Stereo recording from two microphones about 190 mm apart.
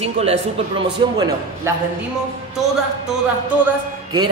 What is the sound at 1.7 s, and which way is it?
Speech, 15° right (ahead or behind).